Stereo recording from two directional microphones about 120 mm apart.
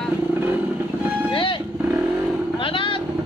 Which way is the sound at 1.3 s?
45° left (ahead or behind).